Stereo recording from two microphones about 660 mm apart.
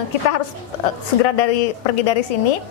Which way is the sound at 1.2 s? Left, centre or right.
Left.